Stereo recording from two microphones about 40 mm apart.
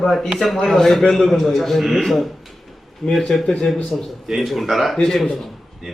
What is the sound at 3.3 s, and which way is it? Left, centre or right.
A man's voice, centre.